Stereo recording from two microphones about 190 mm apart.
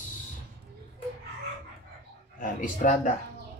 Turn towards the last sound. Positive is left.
turn(degrees=40)  # may be behind; listen again after turning